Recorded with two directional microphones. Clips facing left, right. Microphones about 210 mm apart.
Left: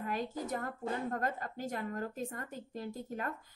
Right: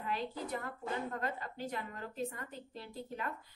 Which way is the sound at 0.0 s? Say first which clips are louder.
Left 2 dB; 45° left (ahead or behind).